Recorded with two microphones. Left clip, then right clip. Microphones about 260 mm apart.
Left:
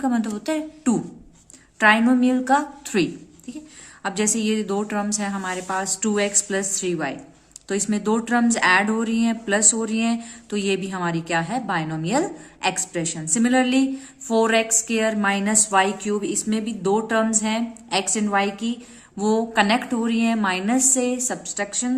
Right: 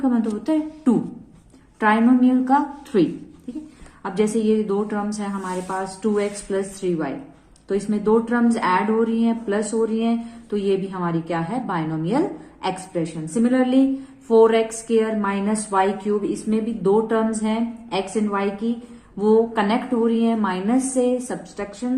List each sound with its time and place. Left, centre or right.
0.0 s speech: left